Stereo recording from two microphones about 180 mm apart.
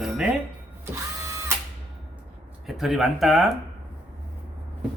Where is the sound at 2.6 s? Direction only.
Centre (ahead or behind).